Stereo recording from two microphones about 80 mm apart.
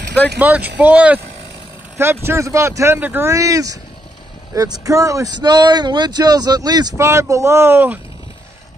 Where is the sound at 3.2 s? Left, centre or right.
Right.